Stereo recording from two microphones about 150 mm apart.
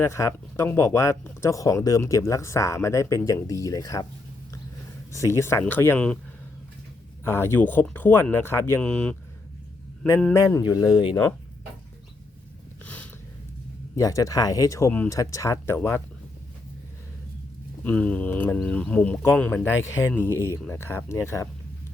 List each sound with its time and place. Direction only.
0.0 s speech: 20° left (ahead or behind)
5.1 s speech: 20° left (ahead or behind)
7.3 s speech: 15° left (ahead or behind)
10.3 s speech: 20° left (ahead or behind)
12.8 s a sound: 10° left (ahead or behind)
13.9 s speech: 25° left (ahead or behind)
17.8 s speech: 10° left (ahead or behind)